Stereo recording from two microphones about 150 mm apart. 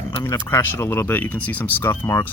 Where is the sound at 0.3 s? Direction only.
15° left (ahead or behind).